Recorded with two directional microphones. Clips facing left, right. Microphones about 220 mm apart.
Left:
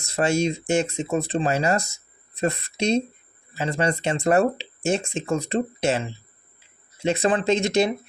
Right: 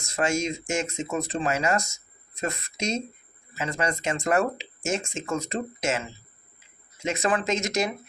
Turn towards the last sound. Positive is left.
turn(degrees=30)  # may be behind; listen again after turning